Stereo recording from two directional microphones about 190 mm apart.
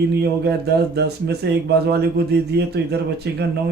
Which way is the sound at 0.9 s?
60° right (ahead or behind).